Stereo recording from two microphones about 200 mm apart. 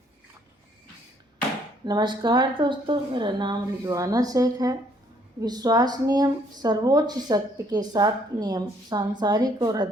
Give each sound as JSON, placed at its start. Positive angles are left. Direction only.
{"t": 1.8, "sound": "speech", "side_deg": -20}